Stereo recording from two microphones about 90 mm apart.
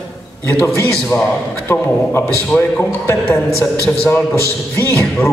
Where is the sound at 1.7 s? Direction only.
25° left (ahead or behind).